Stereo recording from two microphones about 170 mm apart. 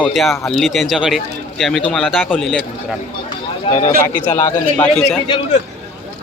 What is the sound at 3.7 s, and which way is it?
Speech, 30° left (ahead or behind).